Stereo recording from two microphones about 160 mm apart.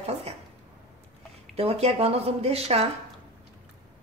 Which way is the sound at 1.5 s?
40° right (ahead or behind).